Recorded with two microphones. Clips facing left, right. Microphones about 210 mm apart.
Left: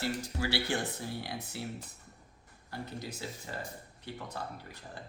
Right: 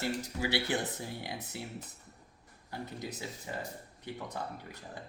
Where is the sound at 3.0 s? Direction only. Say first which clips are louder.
Right 1 dB; 20° right (ahead or behind).